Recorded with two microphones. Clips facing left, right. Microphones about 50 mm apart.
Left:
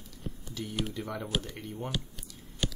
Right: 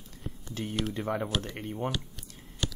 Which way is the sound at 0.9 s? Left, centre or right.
Right.